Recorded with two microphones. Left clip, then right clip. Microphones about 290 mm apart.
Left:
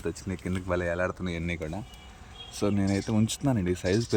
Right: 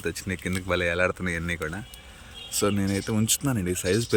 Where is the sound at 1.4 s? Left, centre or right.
Centre.